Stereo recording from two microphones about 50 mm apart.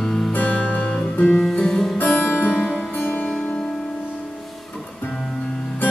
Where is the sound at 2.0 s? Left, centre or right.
Left.